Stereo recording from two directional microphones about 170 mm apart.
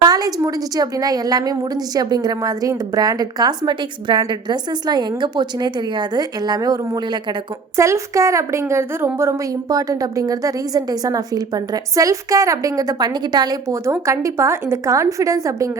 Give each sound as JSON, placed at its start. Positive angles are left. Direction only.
{"t": 0.0, "sound": "a woman's voice", "side_deg": -20}